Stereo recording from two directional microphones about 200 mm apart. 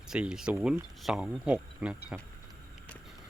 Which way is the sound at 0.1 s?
5° right (ahead or behind).